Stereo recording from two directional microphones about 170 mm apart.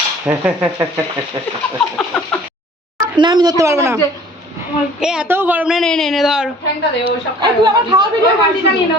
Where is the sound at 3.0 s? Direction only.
25° right (ahead or behind).